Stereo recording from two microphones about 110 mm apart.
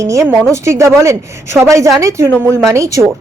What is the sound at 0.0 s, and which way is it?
Speech, 30° right (ahead or behind).